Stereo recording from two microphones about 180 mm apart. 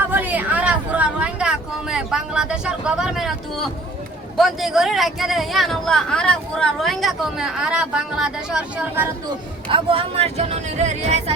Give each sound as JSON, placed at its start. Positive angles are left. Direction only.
{"t": 0.1, "sound": "a sound", "side_deg": -10}
{"t": 4.4, "sound": "speech", "side_deg": 0}
{"t": 9.6, "sound": "speech", "side_deg": -30}